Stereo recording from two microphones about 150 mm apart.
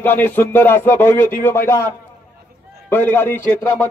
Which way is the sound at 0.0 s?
15° left (ahead or behind).